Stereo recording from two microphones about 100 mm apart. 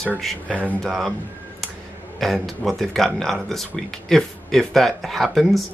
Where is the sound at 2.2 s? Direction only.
Centre (ahead or behind).